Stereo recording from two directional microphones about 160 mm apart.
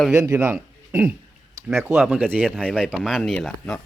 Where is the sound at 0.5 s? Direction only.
15° right (ahead or behind).